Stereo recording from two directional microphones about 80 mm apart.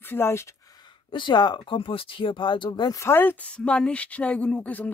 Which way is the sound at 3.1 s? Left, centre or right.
Left.